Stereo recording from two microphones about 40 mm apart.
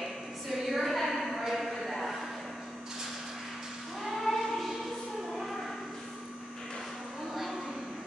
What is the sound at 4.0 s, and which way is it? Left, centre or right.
Choir, centre.